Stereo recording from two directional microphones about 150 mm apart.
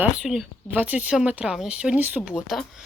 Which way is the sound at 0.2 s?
Centre (ahead or behind).